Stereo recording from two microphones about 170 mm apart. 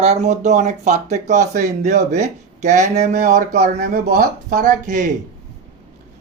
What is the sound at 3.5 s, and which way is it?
Speech, 60° right (ahead or behind).